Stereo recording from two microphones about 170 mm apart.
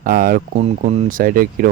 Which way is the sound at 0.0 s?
55° right (ahead or behind).